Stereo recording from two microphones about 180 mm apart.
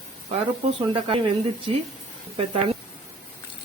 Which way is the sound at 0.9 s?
30° right (ahead or behind).